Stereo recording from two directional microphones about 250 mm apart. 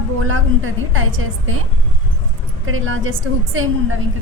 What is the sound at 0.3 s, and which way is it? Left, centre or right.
A woman's voice, right.